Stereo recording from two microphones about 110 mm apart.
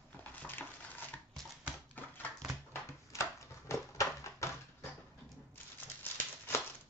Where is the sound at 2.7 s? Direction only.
25° left (ahead or behind).